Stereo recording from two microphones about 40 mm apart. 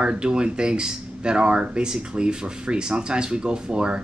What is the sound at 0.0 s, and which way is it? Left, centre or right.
A woman's voice, right.